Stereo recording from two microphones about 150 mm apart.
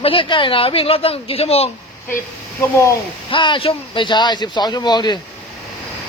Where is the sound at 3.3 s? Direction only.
35° left (ahead or behind).